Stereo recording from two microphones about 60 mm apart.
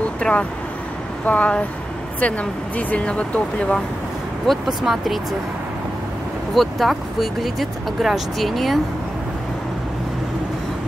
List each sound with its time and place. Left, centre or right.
0.2 s speech: centre
4.5 s speech: centre
6.5 s speech: centre